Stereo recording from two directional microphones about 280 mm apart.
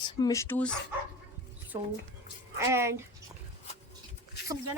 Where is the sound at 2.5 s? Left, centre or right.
Centre.